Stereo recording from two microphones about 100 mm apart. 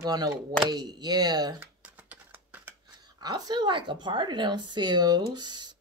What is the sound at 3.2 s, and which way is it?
A woman's voice, 40° right (ahead or behind).